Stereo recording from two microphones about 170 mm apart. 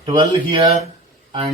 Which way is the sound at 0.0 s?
30° right (ahead or behind).